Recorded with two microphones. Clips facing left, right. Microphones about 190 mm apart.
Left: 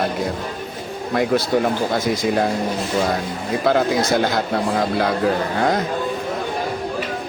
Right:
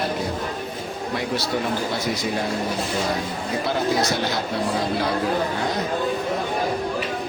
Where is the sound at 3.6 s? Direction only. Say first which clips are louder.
Left 5 dB; 50° left (ahead or behind).